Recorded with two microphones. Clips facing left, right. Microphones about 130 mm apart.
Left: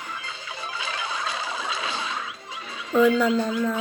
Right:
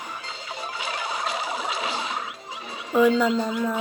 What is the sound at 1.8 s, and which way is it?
Neigh, 20° right (ahead or behind).